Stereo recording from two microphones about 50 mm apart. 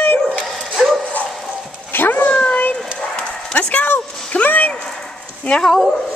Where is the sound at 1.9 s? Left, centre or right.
Left.